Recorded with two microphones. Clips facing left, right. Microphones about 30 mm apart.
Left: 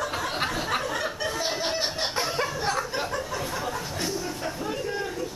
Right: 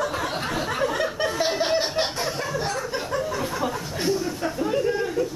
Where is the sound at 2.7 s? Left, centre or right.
Centre.